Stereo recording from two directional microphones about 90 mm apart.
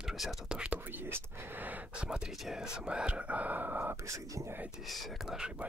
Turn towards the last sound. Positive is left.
turn(degrees=0)  # may be behind; listen again after turning